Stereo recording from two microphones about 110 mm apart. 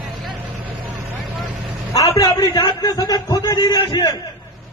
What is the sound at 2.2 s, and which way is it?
A man's voice, 35° left (ahead or behind).